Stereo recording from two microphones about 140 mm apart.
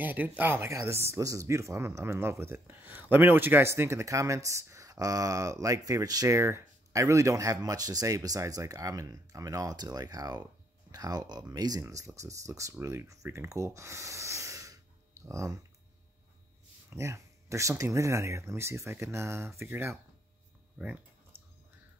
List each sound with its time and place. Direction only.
0.0 s speech: 15° right (ahead or behind)
16.9 s speech: 20° right (ahead or behind)